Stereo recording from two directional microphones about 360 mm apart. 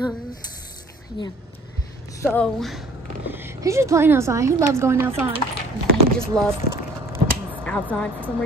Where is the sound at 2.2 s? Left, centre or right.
Centre.